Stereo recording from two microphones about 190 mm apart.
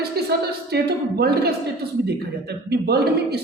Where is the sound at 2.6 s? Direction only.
60° right (ahead or behind).